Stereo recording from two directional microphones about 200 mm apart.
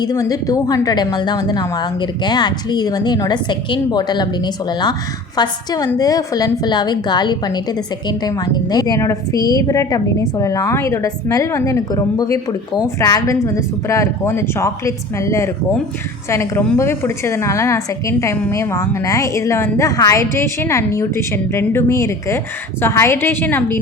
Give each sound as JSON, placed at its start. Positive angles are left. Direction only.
{"t": 0.0, "sound": "a woman's voice", "side_deg": 20}